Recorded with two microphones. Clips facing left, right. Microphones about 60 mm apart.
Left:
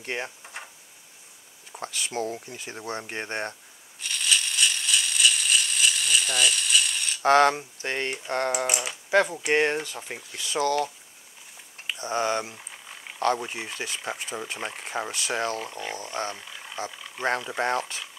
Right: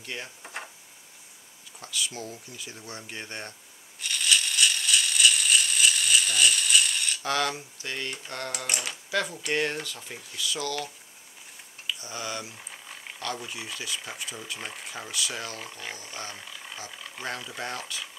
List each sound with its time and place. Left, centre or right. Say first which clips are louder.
0.0 s speech: left 6 dB; left
1.7 s speech: left 2 dB; left
4.0 s a sound: even; centre
7.2 s speech: left 12 dB; left
8.6 s speech: left 4 dB; centre
9.1 s speech: left 7 dB; left
11.9 s speech: left 8 dB; left
12.5 s a sound: even; centre
13.2 s speech: left 9 dB; left
14.9 s speech: left 5 dB; left
15.6 s speech: left 5 dB; centre
16.0 s speech: left 8 dB; left
16.9 s a sound: even; centre
17.6 s speech: left 8 dB; left